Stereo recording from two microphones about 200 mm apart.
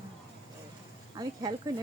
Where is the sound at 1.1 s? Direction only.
20° right (ahead or behind).